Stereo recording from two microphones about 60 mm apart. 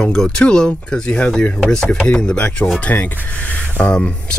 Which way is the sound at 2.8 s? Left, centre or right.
Left.